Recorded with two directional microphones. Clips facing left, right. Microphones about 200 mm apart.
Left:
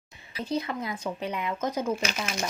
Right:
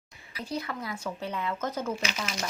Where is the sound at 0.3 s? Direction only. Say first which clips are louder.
Left 4 dB; 20° left (ahead or behind).